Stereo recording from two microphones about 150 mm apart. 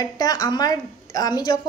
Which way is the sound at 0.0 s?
25° left (ahead or behind).